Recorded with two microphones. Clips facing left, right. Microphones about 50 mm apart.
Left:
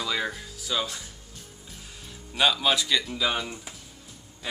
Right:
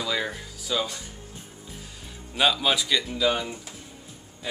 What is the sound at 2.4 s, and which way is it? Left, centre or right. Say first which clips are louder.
Speech: even; centre.